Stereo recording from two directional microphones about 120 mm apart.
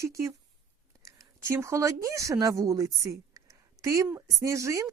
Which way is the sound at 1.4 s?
20° right (ahead or behind).